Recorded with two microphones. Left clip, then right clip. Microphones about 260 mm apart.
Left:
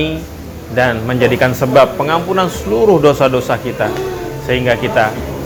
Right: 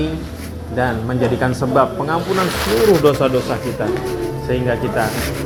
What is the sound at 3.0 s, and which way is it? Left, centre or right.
Speech, left.